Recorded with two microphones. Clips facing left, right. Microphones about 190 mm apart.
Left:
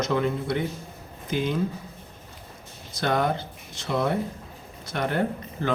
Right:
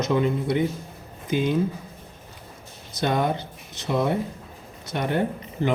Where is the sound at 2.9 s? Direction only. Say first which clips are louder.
Right 1 dB; 20° right (ahead or behind).